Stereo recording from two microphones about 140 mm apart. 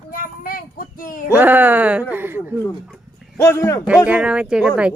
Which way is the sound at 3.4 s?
20° left (ahead or behind).